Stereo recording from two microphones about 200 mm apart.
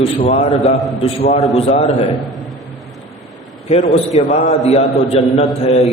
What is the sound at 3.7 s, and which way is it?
A man's voice, 30° left (ahead or behind).